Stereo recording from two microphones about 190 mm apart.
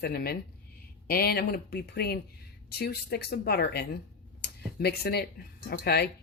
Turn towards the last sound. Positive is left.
turn(degrees=55)  # may be behind; listen again after turning